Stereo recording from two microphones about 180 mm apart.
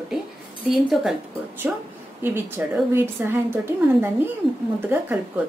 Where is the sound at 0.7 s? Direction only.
Centre (ahead or behind).